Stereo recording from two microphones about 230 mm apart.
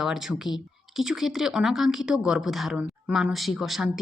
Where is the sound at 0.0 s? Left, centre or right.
Centre.